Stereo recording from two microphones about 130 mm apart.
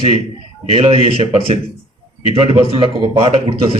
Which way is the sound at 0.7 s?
55° right (ahead or behind).